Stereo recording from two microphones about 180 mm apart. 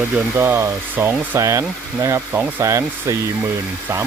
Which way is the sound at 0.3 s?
15° right (ahead or behind).